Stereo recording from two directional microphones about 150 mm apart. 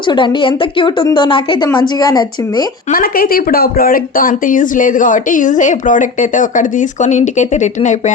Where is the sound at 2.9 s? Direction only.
70° left (ahead or behind).